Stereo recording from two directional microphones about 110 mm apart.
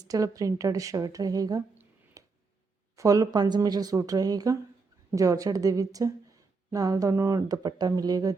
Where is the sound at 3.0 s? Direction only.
30° right (ahead or behind).